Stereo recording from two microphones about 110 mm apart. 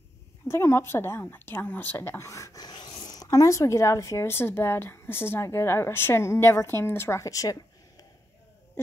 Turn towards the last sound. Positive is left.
turn(degrees=35)  # may be behind; listen again after turning